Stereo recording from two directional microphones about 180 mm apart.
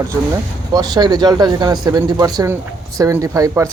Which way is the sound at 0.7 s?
20° right (ahead or behind).